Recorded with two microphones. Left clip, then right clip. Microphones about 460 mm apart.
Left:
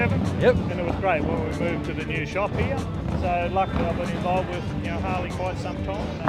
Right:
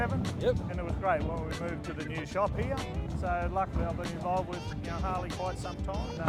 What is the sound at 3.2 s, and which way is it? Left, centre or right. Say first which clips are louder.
Speech: left 8 dB; right.